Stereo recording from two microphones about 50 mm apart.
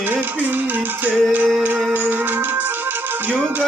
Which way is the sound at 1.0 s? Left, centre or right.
Right.